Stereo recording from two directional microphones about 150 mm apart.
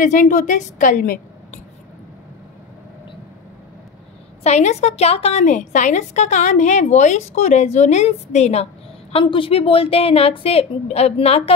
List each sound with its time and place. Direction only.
0.0 s a woman's voice: 60° left (ahead or behind)
4.4 s a woman's voice: 50° left (ahead or behind)
9.1 s a woman's voice: 35° left (ahead or behind)